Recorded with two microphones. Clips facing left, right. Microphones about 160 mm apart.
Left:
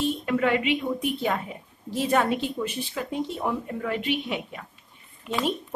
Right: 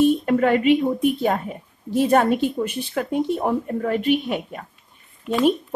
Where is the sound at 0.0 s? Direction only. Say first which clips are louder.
Right 7 dB; 50° right (ahead or behind).